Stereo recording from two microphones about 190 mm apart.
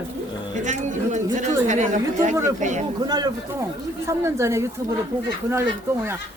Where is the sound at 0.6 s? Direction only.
40° right (ahead or behind).